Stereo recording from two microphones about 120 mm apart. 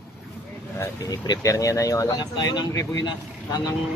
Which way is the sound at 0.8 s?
35° left (ahead or behind).